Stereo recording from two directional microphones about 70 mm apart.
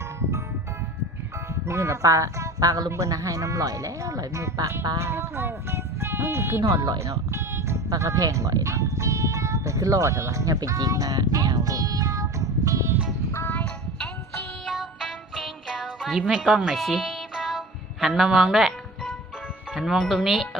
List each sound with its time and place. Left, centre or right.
1.6 s speech: right
7.9 s speech: right
14.7 s music: centre
18.0 s speech: centre
19.7 s speech: centre